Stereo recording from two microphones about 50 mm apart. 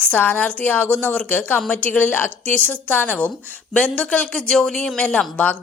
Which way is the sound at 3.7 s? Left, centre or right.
Left.